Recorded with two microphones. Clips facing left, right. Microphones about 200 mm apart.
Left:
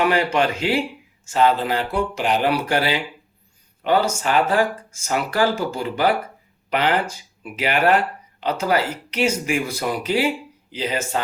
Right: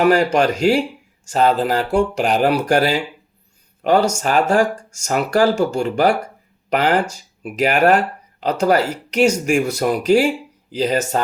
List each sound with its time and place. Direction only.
0.0 s speech: 40° right (ahead or behind)
4.2 s speech: 45° right (ahead or behind)